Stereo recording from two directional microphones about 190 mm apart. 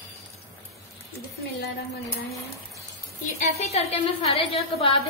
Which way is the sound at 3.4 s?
35° left (ahead or behind).